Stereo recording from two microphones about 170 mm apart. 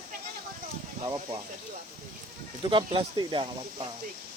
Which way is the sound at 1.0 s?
25° right (ahead or behind).